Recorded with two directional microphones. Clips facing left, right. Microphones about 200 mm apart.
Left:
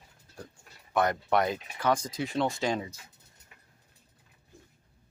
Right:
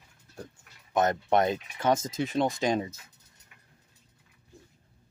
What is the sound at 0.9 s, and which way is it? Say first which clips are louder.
Speech: right 2 dB; 25° right (ahead or behind).